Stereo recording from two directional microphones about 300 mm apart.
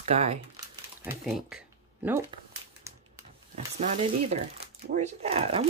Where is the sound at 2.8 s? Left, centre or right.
Centre.